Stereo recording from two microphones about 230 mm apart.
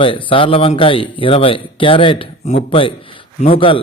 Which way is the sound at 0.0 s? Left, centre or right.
Left.